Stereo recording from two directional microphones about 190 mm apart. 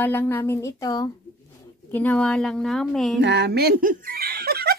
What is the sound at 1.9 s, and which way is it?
A woman's voice, 10° left (ahead or behind).